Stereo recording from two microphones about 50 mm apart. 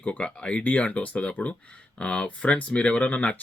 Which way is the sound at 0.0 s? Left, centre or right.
Left.